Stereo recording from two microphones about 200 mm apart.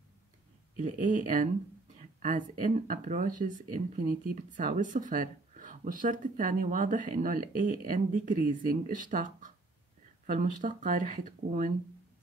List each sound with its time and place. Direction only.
0.7 s speech: 40° right (ahead or behind)